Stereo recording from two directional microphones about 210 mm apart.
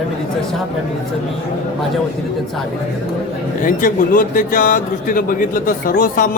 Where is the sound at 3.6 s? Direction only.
40° left (ahead or behind).